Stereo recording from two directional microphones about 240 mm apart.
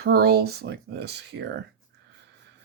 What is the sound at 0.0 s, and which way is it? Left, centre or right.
Speech, right.